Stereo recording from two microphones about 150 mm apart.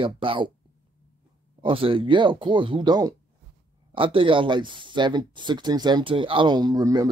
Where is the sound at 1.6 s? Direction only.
35° right (ahead or behind).